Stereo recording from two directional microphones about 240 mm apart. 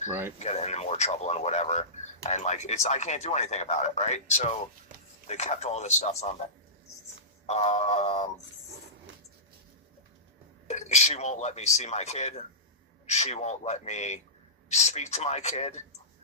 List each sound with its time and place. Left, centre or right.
0.1 s speech: centre
0.3 s a man's voice: left
7.4 s a man's voice: left
10.7 s a man's voice: left